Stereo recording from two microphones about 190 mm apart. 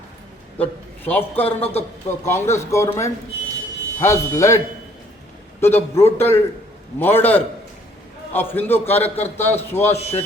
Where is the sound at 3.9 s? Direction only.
15° left (ahead or behind).